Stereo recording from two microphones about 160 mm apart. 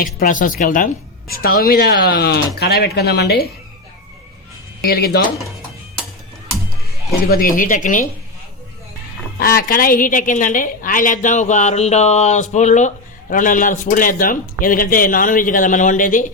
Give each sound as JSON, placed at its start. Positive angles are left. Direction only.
{"t": 0.0, "sound": "a man's voice", "side_deg": 60}
{"t": 4.8, "sound": "speech", "side_deg": 75}
{"t": 7.3, "sound": "a man's voice", "side_deg": 65}
{"t": 9.6, "sound": "a woman's voice", "side_deg": 65}